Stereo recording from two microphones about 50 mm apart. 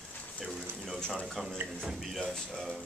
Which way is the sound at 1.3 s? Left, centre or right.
Centre.